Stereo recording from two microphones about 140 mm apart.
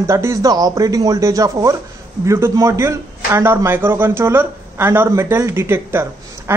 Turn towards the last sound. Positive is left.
turn(degrees=-20)  # may be behind; listen again after turning